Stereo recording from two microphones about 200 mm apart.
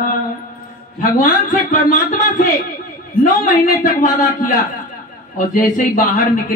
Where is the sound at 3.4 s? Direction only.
45° left (ahead or behind).